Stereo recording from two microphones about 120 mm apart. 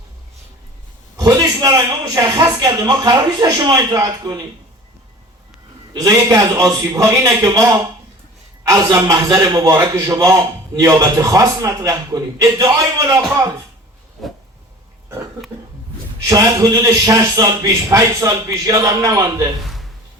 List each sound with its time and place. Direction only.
1.1 s a man's voice: 30° right (ahead or behind)
5.9 s a man's voice: 30° right (ahead or behind)
14.2 s a sound: centre (ahead or behind)
16.3 s a man's voice: 30° right (ahead or behind)